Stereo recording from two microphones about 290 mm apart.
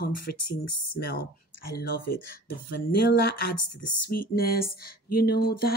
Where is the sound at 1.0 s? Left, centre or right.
Left.